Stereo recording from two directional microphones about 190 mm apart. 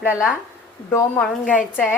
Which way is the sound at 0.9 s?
15° left (ahead or behind).